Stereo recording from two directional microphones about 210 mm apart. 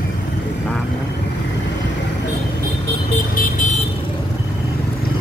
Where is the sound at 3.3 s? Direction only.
40° left (ahead or behind).